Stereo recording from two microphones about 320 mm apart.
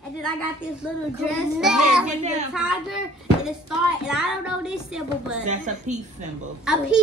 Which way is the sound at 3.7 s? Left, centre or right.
Centre.